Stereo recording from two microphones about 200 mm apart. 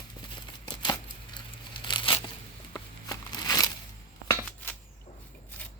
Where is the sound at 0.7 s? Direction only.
20° left (ahead or behind).